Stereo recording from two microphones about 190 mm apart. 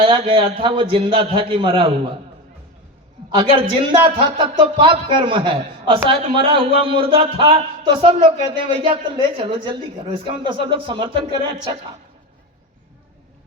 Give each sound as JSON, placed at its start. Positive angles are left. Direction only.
{"t": 0.0, "sound": "a man's voice", "side_deg": -25}
{"t": 3.8, "sound": "a man's voice", "side_deg": -25}